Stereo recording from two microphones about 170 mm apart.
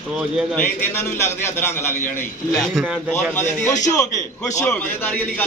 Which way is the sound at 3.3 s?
15° left (ahead or behind).